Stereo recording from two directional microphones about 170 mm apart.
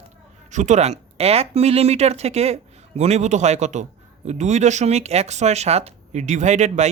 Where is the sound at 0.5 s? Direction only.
45° right (ahead or behind).